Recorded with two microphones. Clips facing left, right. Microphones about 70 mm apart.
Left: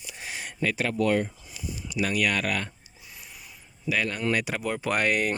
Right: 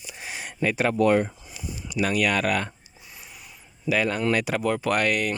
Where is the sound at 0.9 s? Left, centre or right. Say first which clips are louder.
Right 5 dB; right.